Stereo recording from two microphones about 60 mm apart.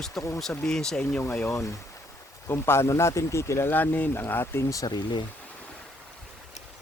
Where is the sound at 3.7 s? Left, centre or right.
Left.